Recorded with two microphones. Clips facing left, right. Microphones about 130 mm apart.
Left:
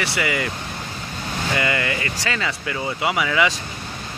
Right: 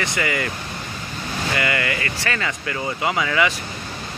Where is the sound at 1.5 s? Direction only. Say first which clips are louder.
Left 1 dB; 20° left (ahead or behind).